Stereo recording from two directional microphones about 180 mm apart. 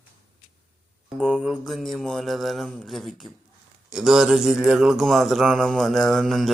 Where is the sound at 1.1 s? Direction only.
5° right (ahead or behind).